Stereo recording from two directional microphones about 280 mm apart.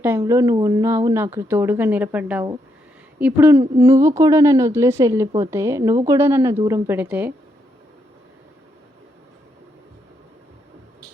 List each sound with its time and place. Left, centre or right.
0.0 s a woman's voice: centre